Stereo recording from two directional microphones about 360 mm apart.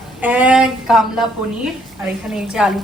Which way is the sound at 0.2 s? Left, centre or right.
Centre.